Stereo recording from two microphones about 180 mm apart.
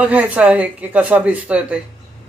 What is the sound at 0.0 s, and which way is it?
Speech, 5° right (ahead or behind).